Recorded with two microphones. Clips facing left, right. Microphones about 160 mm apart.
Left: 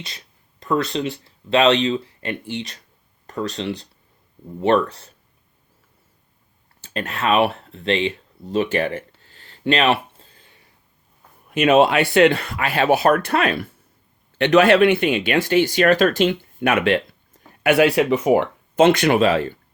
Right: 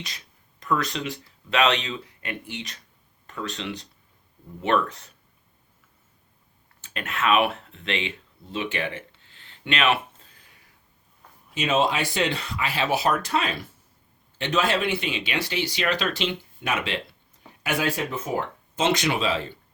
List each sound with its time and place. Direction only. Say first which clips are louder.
0.6 s speech: left 5 dB; 30° left (ahead or behind)
6.8 s a sound: left 3 dB; 35° left (ahead or behind)
11.5 s speech: left 9 dB; 60° left (ahead or behind)